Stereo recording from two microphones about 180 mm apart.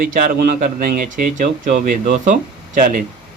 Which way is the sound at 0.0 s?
50° right (ahead or behind).